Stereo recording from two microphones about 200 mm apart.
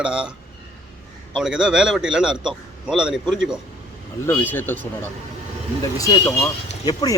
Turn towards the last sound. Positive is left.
turn(degrees=15)  # may be behind; listen again after turning